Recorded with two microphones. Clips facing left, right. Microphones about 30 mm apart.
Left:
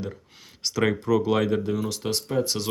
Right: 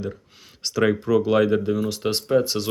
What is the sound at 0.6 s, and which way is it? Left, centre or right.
Speech, centre.